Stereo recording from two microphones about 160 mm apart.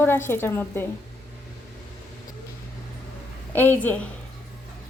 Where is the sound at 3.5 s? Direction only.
10° left (ahead or behind).